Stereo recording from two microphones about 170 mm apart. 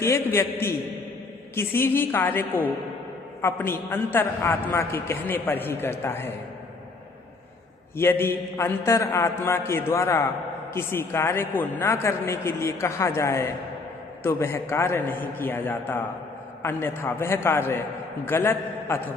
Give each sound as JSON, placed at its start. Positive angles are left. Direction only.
{"t": 0.0, "sound": "a man's voice", "side_deg": 15}
{"t": 1.5, "sound": "a man's voice", "side_deg": 15}
{"t": 7.9, "sound": "a man's voice", "side_deg": 15}